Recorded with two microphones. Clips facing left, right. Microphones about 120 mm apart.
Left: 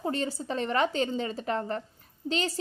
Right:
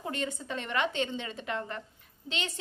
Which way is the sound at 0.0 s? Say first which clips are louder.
Left 5 dB; 35° left (ahead or behind).